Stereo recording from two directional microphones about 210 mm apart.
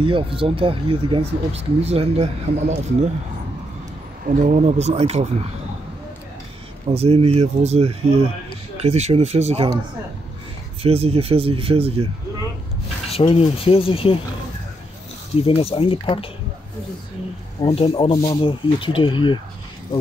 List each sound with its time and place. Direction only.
0.0 s speech: 25° right (ahead or behind)
2.5 s speech: 50° right (ahead or behind)
4.3 s speech: 35° right (ahead or behind)
6.9 s speech: 30° right (ahead or behind)
10.8 s speech: 30° right (ahead or behind)
13.1 s speech: 25° left (ahead or behind)
15.4 s speech: 25° left (ahead or behind)
17.6 s speech: 25° left (ahead or behind)